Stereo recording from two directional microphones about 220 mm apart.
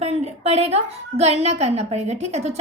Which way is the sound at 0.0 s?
30° right (ahead or behind).